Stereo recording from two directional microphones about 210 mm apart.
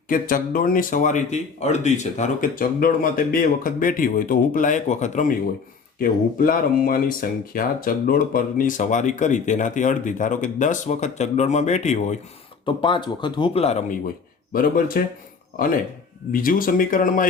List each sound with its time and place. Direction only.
0.1 s speech: 40° left (ahead or behind)
12.6 s speech: 25° left (ahead or behind)
14.5 s speech: 45° left (ahead or behind)
16.3 s speech: 40° left (ahead or behind)